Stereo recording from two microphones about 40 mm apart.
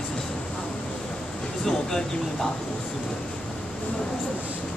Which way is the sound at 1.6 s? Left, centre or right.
Centre.